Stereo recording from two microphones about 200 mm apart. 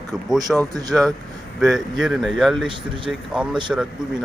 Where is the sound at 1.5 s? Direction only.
Centre (ahead or behind).